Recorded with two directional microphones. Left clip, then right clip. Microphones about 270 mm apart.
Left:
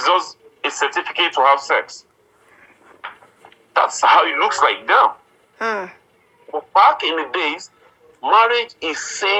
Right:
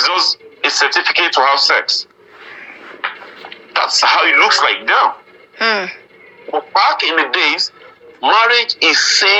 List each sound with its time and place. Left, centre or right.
0.0 s speech: right
3.4 s speech: right